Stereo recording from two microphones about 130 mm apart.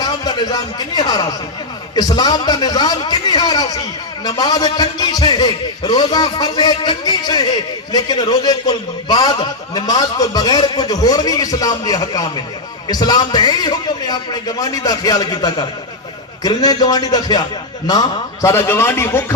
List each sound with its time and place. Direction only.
0.0 s a man's voice: 30° left (ahead or behind)
18.4 s a man's voice: 20° left (ahead or behind)